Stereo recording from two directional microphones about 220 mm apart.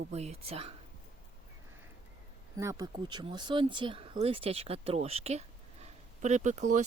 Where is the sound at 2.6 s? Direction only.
15° right (ahead or behind).